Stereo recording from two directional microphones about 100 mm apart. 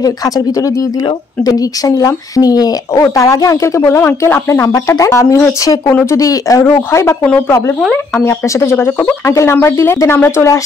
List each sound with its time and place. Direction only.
0.0 s speech: 40° left (ahead or behind)
8.3 s speech: 25° left (ahead or behind)